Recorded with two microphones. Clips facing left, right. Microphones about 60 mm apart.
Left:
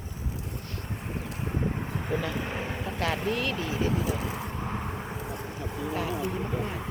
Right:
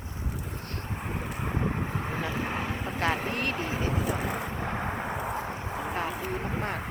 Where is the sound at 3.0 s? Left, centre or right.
Right.